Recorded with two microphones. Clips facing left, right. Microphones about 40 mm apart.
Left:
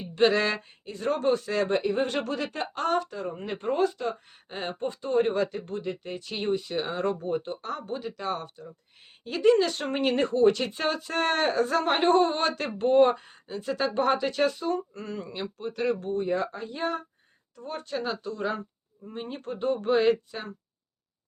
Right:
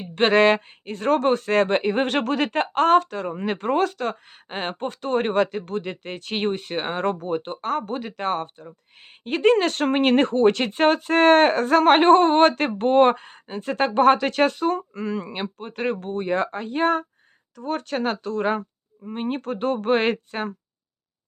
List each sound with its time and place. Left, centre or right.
0.0 s speech: right
15.4 s speech: right
17.6 s speech: right
19.4 s speech: right